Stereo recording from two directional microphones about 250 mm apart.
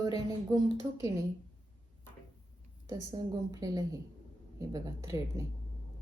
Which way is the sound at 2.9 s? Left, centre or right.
Centre.